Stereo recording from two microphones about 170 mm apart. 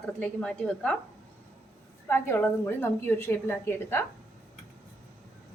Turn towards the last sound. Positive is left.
turn(degrees=15)  # may be behind; listen again after turning